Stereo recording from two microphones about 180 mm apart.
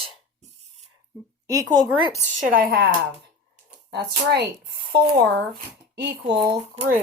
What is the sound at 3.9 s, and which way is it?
Speech, 65° right (ahead or behind).